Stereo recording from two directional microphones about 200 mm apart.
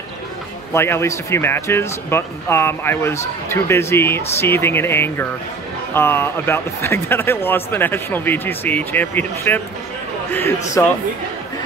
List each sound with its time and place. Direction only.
0.7 s speech: 10° left (ahead or behind)
10.8 s speech: 15° left (ahead or behind)